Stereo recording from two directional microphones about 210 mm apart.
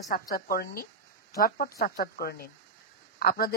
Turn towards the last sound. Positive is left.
turn(degrees=45)  # may be behind; listen again after turning